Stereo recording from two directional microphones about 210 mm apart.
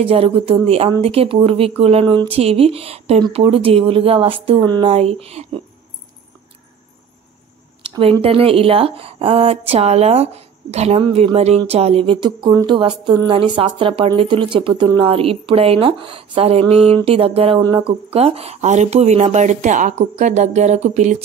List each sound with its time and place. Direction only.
0.0 s a woman's voice: 30° right (ahead or behind)
7.8 s a sound: 25° right (ahead or behind)
8.2 s a woman's voice: 25° right (ahead or behind)